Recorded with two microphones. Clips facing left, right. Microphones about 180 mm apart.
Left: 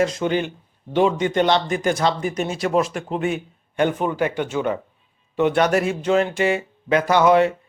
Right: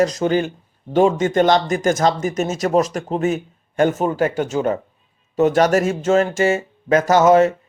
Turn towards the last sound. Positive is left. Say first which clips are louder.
# right 3 dB
turn(degrees=-40)  # may be behind; listen again after turning